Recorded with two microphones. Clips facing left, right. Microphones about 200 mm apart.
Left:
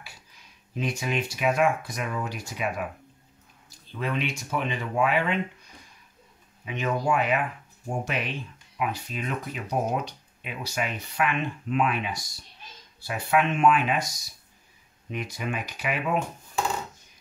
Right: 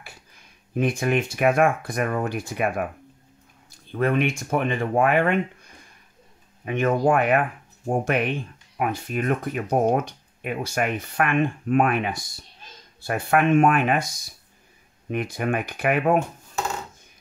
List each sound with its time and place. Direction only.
0.0 s speech: 55° right (ahead or behind)
6.6 s speech: 55° right (ahead or behind)
15.0 s speech: 55° right (ahead or behind)